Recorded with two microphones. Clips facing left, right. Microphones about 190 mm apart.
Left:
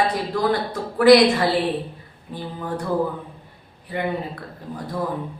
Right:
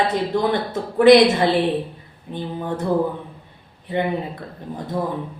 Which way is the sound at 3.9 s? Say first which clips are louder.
Right 3 dB; 25° right (ahead or behind).